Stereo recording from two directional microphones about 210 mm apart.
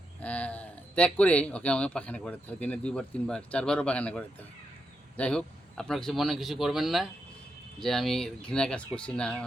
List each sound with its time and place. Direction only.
0.2 s speech: 5° left (ahead or behind)